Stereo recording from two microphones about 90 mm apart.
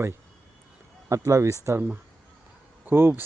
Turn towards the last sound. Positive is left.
turn(degrees=-25)  # may be behind; listen again after turning